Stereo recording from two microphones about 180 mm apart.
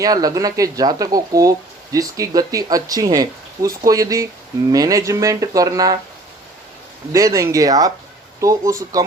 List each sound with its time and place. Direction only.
0.0 s speech: 20° right (ahead or behind)
7.1 s speech: 15° right (ahead or behind)